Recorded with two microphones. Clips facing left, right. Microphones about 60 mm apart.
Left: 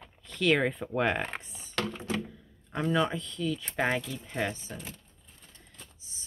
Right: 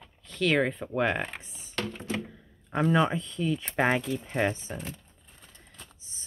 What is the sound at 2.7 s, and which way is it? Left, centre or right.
Speech, right.